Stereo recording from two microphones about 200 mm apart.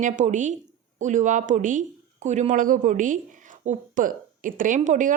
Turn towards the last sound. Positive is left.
turn(degrees=-40)  # may be behind; listen again after turning